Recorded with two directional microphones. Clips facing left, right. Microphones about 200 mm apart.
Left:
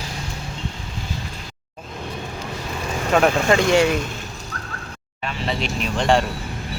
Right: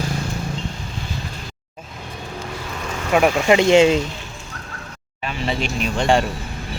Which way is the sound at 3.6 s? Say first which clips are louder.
Right 7 dB; 20° right (ahead or behind).